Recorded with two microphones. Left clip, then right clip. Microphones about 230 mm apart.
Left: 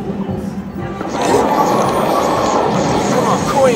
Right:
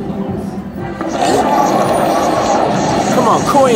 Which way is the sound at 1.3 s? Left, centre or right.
Centre.